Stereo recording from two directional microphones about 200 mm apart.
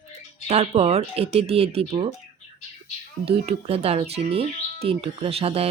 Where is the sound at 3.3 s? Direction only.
30° right (ahead or behind).